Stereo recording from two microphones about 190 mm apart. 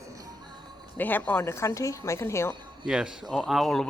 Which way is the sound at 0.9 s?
10° left (ahead or behind).